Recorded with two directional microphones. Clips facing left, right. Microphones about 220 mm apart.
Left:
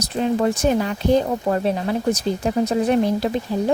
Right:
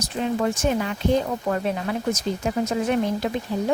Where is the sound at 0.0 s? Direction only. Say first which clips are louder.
Left 4 dB; 35° left (ahead or behind).